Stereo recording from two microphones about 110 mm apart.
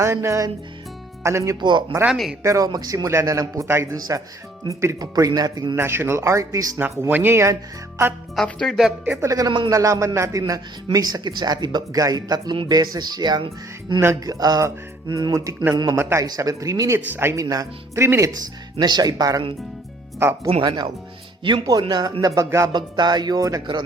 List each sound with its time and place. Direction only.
0.0 s speech: 25° right (ahead or behind)
2.0 s speech: centre (ahead or behind)
2.4 s speech: 30° right (ahead or behind)
5.7 s speech: 20° right (ahead or behind)
8.4 s speech: 5° left (ahead or behind)
9.2 s speech: 30° right (ahead or behind)
17.4 s speech: 35° right (ahead or behind)
18.8 s speech: 40° right (ahead or behind)
20.1 s speech: 25° right (ahead or behind)
20.6 s speech: 40° right (ahead or behind)
22.4 s speech: 30° right (ahead or behind)
22.7 s speech: 40° right (ahead or behind)